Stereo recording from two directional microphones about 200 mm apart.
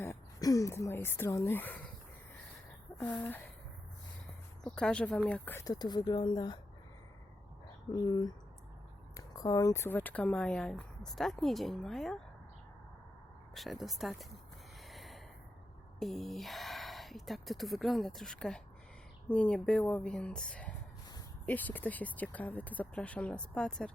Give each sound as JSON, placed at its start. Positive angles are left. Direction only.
{"t": 0.0, "sound": "speech", "side_deg": 15}
{"t": 2.9, "sound": "a sound", "side_deg": 15}
{"t": 4.6, "sound": "speech", "side_deg": 5}
{"t": 7.9, "sound": "speech", "side_deg": 20}
{"t": 13.5, "sound": "speech", "side_deg": 0}
{"t": 14.8, "sound": "snort", "side_deg": 0}
{"t": 16.0, "sound": "speech", "side_deg": 0}